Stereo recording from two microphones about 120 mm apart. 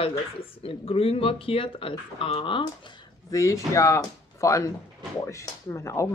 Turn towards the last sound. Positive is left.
turn(degrees=25)  # may be behind; listen again after turning